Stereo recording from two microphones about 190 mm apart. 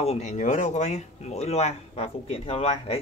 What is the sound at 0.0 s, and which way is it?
Speech, 35° left (ahead or behind).